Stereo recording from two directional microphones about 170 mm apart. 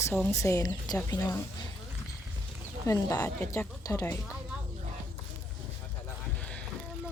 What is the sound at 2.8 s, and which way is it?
A woman's voice, 20° left (ahead or behind).